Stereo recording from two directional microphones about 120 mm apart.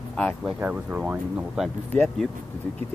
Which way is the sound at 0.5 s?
10° right (ahead or behind).